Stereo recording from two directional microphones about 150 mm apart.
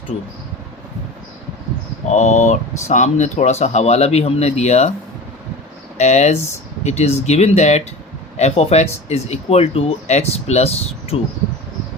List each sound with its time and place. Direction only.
2.0 s speech: 50° left (ahead or behind)
6.0 s speech: 50° left (ahead or behind)